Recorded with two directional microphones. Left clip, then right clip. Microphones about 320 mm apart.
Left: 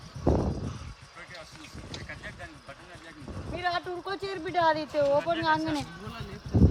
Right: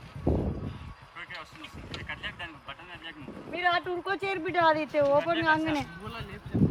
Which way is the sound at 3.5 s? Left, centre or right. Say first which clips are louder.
Right 3 dB; right.